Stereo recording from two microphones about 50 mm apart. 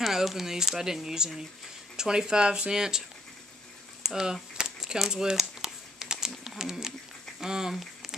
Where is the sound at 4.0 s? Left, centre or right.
Centre.